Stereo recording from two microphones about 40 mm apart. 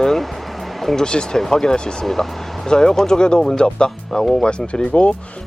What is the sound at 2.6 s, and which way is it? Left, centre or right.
Speech, centre.